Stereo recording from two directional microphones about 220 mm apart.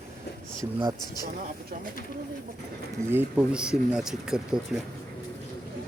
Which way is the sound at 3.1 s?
5° right (ahead or behind).